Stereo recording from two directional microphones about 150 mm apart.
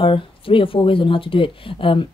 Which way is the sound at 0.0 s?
35° left (ahead or behind).